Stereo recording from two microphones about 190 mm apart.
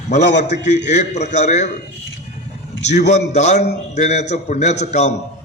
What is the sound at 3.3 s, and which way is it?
A man's voice, 35° left (ahead or behind).